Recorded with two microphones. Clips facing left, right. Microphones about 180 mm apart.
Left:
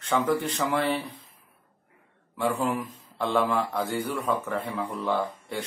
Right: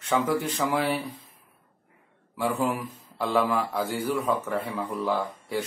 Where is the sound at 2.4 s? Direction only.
5° right (ahead or behind).